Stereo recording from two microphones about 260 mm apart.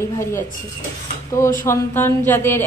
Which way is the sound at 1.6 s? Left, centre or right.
Centre.